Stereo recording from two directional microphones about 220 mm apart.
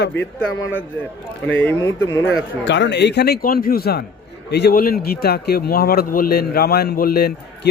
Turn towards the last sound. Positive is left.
turn(degrees=45)  # may be behind; listen again after turning